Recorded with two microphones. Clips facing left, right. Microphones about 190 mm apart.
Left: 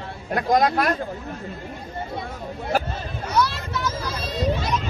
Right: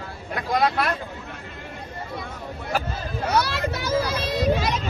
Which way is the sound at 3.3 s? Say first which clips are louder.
Left 1 dB; 75° right (ahead or behind).